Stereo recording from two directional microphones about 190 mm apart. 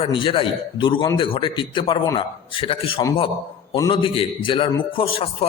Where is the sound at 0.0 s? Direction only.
25° left (ahead or behind).